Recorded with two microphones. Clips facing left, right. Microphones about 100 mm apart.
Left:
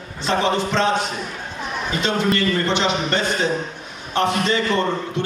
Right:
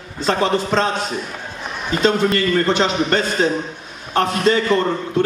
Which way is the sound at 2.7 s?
40° right (ahead or behind).